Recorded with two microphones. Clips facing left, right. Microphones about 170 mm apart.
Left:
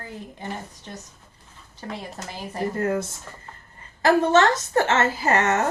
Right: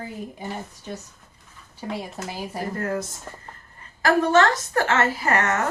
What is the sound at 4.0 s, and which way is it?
A woman's voice, 25° left (ahead or behind).